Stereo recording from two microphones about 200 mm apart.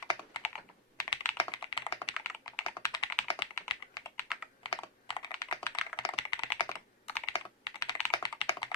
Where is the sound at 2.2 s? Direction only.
15° left (ahead or behind).